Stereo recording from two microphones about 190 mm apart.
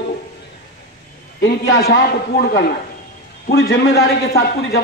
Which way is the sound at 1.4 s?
65° left (ahead or behind).